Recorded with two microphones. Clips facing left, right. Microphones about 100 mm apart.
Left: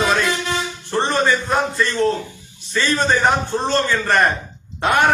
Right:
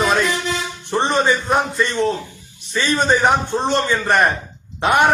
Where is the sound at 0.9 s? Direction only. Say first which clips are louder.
Right 1 dB; 20° right (ahead or behind).